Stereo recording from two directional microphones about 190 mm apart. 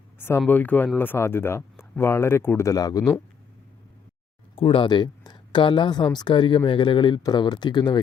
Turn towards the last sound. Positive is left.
turn(degrees=25)  # may be behind; listen again after turning